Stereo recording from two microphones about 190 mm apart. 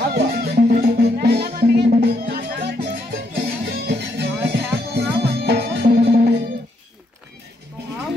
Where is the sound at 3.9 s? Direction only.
60° right (ahead or behind).